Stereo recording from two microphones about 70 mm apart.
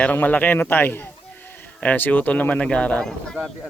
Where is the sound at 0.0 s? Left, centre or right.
Left.